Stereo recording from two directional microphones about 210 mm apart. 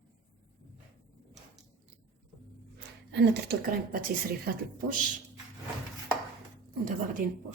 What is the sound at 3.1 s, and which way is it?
Speech, 50° right (ahead or behind).